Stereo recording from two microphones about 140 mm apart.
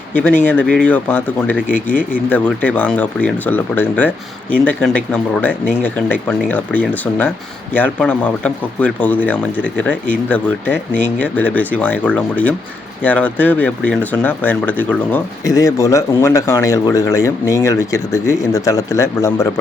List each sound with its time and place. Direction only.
0.1 s speech: 10° left (ahead or behind)
15.4 s speech: 25° left (ahead or behind)